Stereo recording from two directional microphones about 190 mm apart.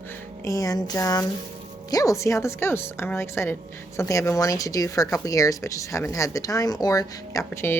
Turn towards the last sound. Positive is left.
turn(degrees=15)  # may be behind; listen again after turning